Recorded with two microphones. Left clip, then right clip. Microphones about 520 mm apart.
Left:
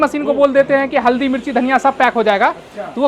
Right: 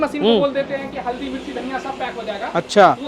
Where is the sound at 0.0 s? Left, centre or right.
Left.